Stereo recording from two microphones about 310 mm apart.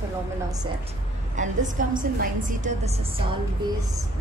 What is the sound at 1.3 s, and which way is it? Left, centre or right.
A woman's voice, right.